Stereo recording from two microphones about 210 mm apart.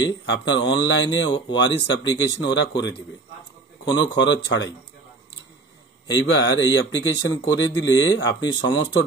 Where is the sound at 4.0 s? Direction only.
55° left (ahead or behind).